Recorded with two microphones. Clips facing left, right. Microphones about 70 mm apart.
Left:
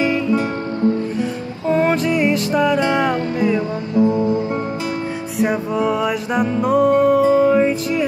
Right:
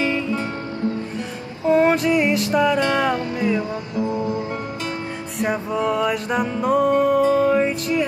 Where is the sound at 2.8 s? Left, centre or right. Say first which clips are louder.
Left 2 dB; centre.